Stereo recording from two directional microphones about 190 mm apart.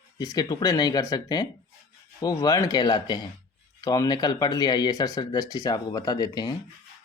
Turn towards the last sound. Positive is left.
turn(degrees=20)  # may be behind; listen again after turning